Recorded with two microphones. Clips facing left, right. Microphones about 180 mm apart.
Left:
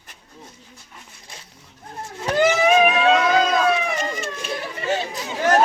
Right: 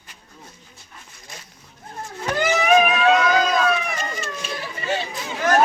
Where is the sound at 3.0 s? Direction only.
25° left (ahead or behind).